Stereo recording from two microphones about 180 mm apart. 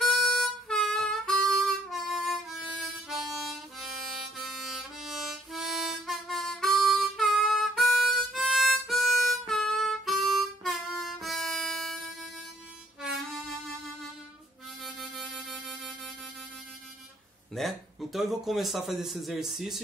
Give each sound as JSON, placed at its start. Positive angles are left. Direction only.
{"t": 0.0, "sound": "harmonica", "side_deg": 0}
{"t": 14.8, "sound": "harmonica", "side_deg": 0}
{"t": 17.6, "sound": "a man's voice", "side_deg": 0}